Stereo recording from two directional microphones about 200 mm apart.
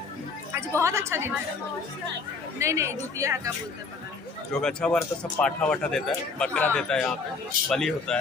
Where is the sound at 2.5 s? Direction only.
15° right (ahead or behind).